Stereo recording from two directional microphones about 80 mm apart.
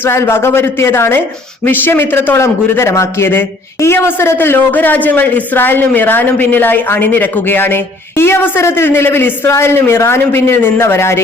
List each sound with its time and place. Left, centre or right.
0.0 s a man's voice: left